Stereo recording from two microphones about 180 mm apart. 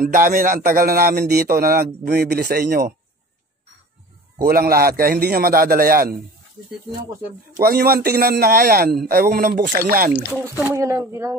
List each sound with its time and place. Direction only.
0.0 s a man's voice: 50° right (ahead or behind)
4.5 s a man's voice: 55° right (ahead or behind)
7.5 s a man's voice: 60° right (ahead or behind)
10.6 s speech: 15° right (ahead or behind)